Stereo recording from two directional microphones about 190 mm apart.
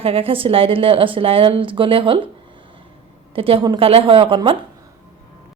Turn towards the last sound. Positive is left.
turn(degrees=-25)  # may be behind; listen again after turning